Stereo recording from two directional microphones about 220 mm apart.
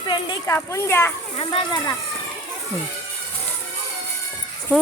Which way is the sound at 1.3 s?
20° left (ahead or behind).